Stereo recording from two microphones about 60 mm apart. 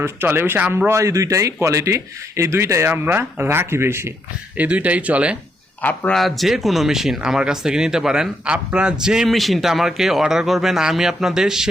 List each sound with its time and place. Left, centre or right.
0.0 s speech: right
0.9 s speech: right
4.5 s speech: right
5.8 s speech: left
6.1 s speech: centre
9.3 s speech: centre